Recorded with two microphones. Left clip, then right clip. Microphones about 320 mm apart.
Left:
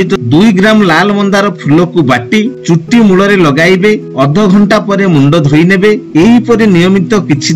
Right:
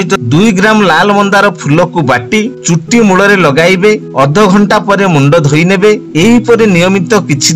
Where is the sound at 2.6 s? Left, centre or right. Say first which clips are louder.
Even; right.